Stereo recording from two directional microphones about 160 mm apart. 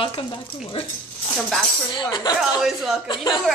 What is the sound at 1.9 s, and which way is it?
Speech, 30° left (ahead or behind).